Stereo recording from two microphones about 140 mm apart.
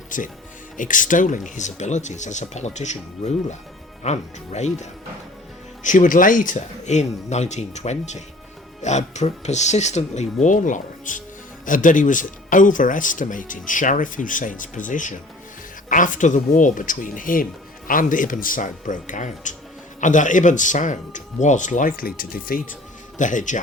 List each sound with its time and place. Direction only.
0.1 s speech: 70° left (ahead or behind)
5.8 s speech: 65° left (ahead or behind); by 22.6 s 90° left
23.1 s speech: 65° left (ahead or behind)